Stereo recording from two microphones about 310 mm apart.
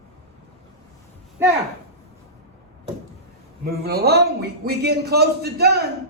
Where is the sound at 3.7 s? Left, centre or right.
Right.